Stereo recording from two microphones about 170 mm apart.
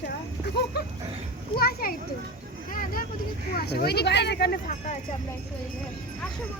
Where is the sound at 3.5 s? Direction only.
65° left (ahead or behind).